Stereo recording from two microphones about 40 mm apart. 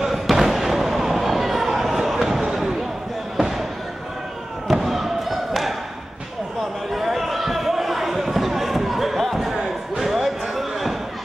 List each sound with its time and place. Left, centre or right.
0.0 s fireworks: centre
2.4 s basketball bounce: centre
3.3 s basketball bounce: centre
4.6 s thump: centre
6.9 s basketball bounce: centre
9.9 s a sound: centre